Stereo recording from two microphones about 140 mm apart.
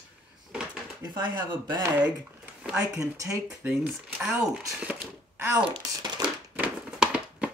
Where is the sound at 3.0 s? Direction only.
20° right (ahead or behind).